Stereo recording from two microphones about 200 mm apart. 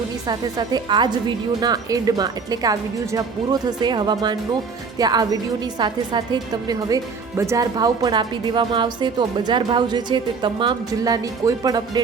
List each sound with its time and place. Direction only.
0.3 s speech: 20° right (ahead or behind)